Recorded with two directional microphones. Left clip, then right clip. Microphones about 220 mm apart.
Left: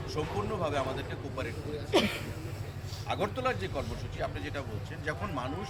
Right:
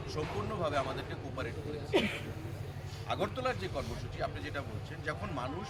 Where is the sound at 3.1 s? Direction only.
Centre (ahead or behind).